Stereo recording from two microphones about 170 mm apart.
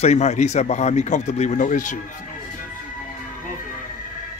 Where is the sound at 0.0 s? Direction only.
40° left (ahead or behind).